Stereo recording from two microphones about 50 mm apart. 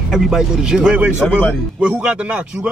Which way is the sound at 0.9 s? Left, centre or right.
Right.